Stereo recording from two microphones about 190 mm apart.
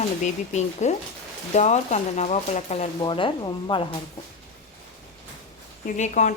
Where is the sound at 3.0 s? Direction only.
25° left (ahead or behind).